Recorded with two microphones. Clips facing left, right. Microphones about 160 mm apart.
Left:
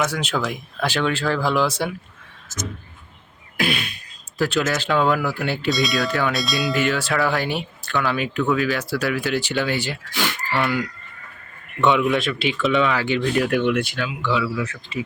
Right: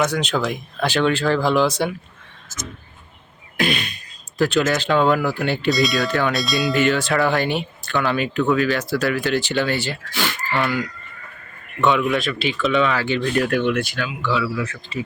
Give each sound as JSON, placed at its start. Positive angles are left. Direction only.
{"t": 0.0, "sound": "speech", "side_deg": 5}
{"t": 3.6, "sound": "speech", "side_deg": 5}
{"t": 11.8, "sound": "a man's voice", "side_deg": 20}
{"t": 12.0, "sound": "speech", "side_deg": 5}
{"t": 12.9, "sound": "speech", "side_deg": 15}